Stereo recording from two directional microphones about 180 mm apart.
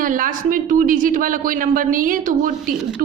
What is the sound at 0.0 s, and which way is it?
A woman's voice, 50° right (ahead or behind).